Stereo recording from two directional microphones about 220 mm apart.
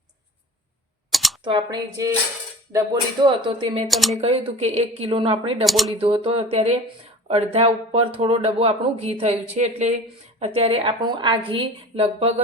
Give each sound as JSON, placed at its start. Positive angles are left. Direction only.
{"t": 1.1, "sound": "typing", "side_deg": 0}
{"t": 1.5, "sound": "speech", "side_deg": -20}
{"t": 3.8, "sound": "speech", "side_deg": 0}
{"t": 4.2, "sound": "speech", "side_deg": -25}
{"t": 5.6, "sound": "speech", "side_deg": 0}
{"t": 6.0, "sound": "speech", "side_deg": -25}